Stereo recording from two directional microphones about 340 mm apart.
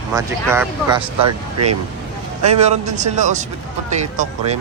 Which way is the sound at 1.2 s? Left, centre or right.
Right.